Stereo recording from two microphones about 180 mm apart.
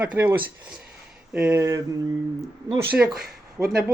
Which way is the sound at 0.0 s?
10° right (ahead or behind).